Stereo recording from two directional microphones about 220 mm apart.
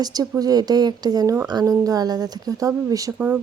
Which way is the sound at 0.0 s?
15° right (ahead or behind).